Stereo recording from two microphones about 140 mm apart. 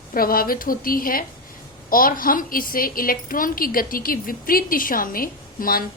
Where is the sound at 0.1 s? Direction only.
90° left.